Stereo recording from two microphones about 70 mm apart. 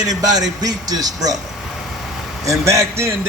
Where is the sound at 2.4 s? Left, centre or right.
Right.